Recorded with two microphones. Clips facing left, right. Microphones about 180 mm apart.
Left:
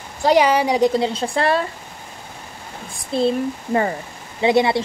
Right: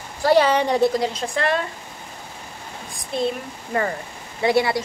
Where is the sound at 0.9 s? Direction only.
30° left (ahead or behind).